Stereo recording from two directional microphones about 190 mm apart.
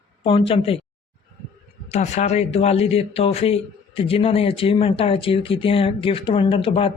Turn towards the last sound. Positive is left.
turn(degrees=30)  # may be behind; listen again after turning